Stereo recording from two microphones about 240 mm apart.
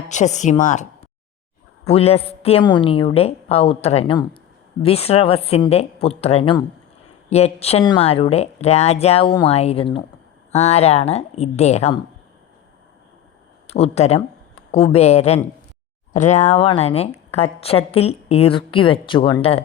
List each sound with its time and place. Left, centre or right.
0.1 s speech: left
1.9 s a woman's voice: left
13.7 s a woman's voice: left